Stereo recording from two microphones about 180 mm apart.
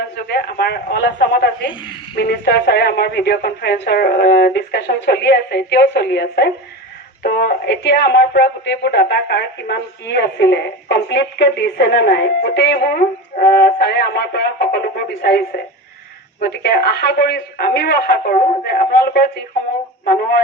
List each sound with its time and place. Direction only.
0.3 s speech: 65° left (ahead or behind)
16.4 s speech: 65° left (ahead or behind)